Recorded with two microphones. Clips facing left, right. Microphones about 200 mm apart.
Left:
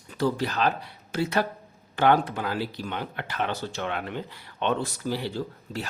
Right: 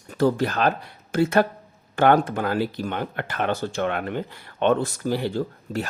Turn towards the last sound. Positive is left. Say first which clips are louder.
# right 6 dB
turn(degrees=-50)  # may be behind; listen again after turning